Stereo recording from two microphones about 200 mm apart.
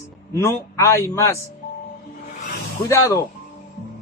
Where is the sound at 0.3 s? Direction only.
15° left (ahead or behind).